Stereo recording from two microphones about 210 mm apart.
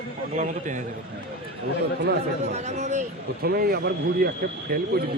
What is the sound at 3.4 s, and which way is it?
Speech, 45° right (ahead or behind).